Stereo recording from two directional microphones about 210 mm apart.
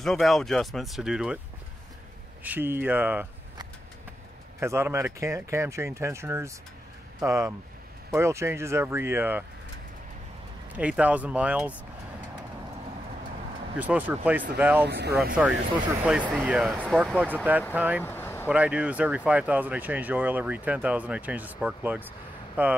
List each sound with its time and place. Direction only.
0.0 s speech: centre (ahead or behind)
2.4 s speech: 10° right (ahead or behind)
10.8 s speech: 5° right (ahead or behind)
13.7 s speech: 10° right (ahead or behind)
14.9 s speech: 50° right (ahead or behind)
15.4 s speech: 5° right (ahead or behind)
18.0 s vehicle: 10° left (ahead or behind)
18.5 s speech: 5° right (ahead or behind)